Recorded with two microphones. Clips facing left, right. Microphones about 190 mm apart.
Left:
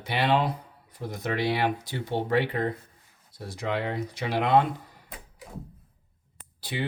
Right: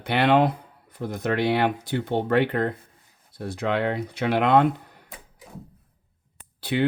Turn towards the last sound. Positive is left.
turn(degrees=-60)  # may be behind; listen again after turning